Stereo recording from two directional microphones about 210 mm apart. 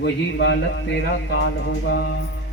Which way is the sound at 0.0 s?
60° left (ahead or behind).